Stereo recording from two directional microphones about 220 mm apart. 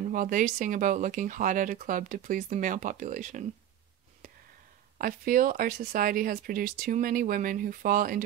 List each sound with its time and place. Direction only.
0.0 s speech: 35° right (ahead or behind)
4.9 s speech: 40° right (ahead or behind)